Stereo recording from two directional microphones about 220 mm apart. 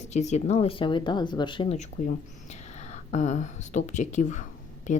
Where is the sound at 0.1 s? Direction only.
30° left (ahead or behind).